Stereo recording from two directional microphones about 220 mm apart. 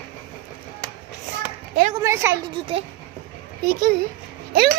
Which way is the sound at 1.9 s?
15° right (ahead or behind).